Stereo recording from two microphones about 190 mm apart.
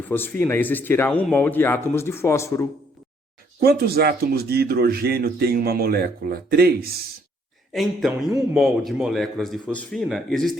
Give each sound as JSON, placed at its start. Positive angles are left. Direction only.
{"t": 0.0, "sound": "speech", "side_deg": 10}
{"t": 3.6, "sound": "speech", "side_deg": -55}
{"t": 7.7, "sound": "speech", "side_deg": 0}